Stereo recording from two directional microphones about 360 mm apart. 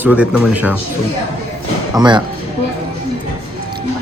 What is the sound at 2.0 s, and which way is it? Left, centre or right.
Speech, centre.